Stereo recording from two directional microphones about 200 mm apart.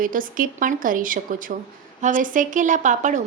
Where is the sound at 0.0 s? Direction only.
45° right (ahead or behind).